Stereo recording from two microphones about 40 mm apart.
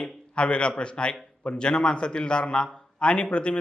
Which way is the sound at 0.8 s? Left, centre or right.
Left.